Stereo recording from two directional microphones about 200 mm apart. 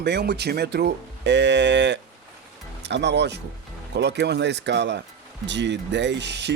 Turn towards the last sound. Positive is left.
turn(degrees=-60)  # may be behind; listen again after turning